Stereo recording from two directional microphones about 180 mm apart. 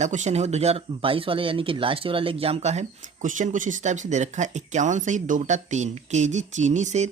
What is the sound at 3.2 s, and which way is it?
Speech, 45° right (ahead or behind).